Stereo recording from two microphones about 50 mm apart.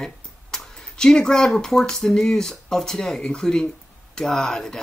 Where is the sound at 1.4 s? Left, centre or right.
Centre.